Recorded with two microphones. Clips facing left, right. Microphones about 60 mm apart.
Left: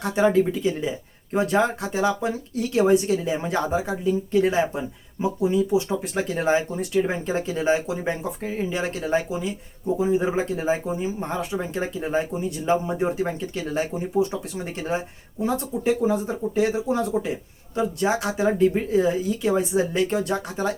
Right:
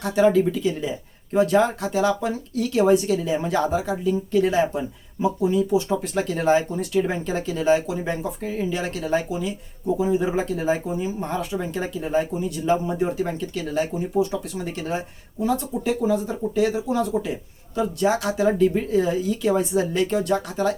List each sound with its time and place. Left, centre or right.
0.0 s speech: left